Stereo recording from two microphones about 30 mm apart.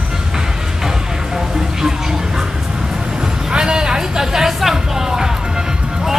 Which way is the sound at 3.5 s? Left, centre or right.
Right.